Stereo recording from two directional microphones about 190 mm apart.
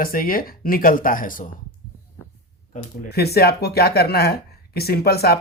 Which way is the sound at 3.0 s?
55° left (ahead or behind).